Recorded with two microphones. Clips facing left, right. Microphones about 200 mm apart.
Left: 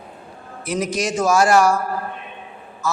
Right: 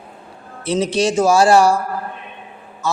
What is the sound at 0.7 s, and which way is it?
A man's voice, 30° right (ahead or behind).